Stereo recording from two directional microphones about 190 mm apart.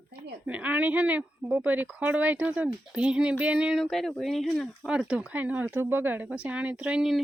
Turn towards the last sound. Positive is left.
turn(degrees=-5)  # may be behind; listen again after turning